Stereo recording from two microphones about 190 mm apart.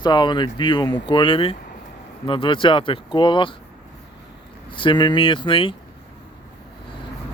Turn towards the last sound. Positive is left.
turn(degrees=25)  # may be behind; listen again after turning